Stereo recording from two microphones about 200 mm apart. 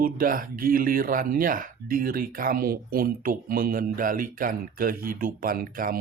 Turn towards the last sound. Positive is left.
turn(degrees=-45)  # may be behind; listen again after turning